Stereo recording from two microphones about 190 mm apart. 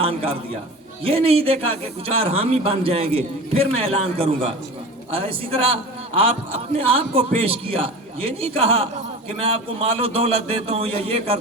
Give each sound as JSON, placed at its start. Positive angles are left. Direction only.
{"t": 0.0, "sound": "a man's voice", "side_deg": -30}